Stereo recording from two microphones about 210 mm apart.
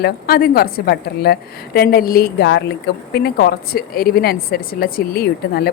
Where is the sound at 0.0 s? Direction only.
45° left (ahead or behind).